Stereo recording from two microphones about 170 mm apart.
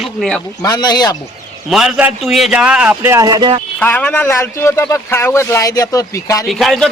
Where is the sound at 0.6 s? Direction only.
25° left (ahead or behind).